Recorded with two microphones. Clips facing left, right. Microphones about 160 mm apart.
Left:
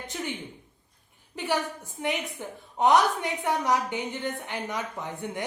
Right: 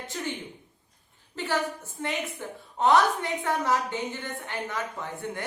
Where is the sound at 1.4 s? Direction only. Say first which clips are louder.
Even; 15° left (ahead or behind).